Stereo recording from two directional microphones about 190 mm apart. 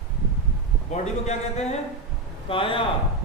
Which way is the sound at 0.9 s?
35° left (ahead or behind).